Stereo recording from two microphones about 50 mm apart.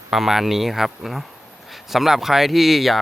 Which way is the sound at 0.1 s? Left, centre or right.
Centre.